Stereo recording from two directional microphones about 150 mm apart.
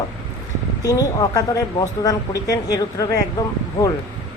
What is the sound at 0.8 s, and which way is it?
Speech, 25° left (ahead or behind).